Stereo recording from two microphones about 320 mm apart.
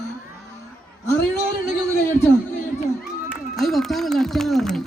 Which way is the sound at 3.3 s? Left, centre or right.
Centre.